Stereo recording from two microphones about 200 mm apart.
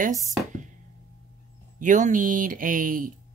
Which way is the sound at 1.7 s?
40° right (ahead or behind).